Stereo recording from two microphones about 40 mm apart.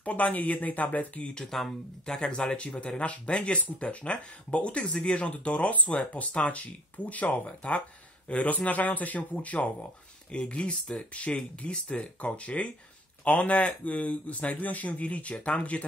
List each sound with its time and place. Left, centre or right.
0.0 s speech: left
1.2 s speech: centre
2.4 s speech: left
10.3 s speech: left